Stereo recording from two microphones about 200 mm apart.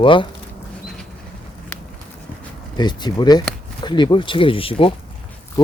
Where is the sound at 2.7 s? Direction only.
20° left (ahead or behind).